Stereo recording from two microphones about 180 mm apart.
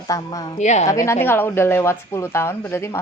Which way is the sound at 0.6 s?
40° left (ahead or behind).